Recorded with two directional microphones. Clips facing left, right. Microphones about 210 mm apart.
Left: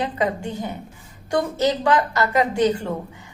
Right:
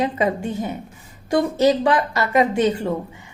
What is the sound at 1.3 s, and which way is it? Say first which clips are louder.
A woman's voice: right 4 dB; 20° right (ahead or behind).